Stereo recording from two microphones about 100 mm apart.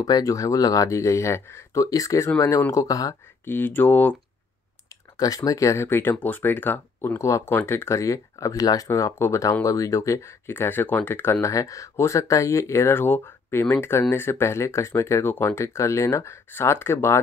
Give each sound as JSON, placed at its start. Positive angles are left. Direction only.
{"t": 0.0, "sound": "speech", "side_deg": 35}
{"t": 3.4, "sound": "speech", "side_deg": 20}
{"t": 5.1, "sound": "speech", "side_deg": 35}